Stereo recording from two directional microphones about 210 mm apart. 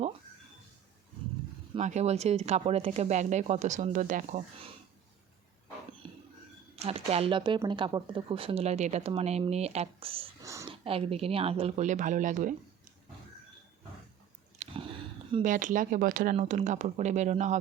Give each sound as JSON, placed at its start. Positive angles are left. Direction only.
{"t": 1.7, "sound": "speech", "side_deg": -35}
{"t": 6.7, "sound": "speech", "side_deg": -30}
{"t": 10.4, "sound": "a woman's voice", "side_deg": -15}
{"t": 10.8, "sound": "speech", "side_deg": -25}
{"t": 14.6, "sound": "a sound", "side_deg": -35}
{"t": 15.4, "sound": "speech", "side_deg": -40}